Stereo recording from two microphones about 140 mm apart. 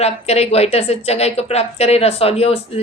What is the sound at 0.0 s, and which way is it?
A woman's voice, 50° left (ahead or behind).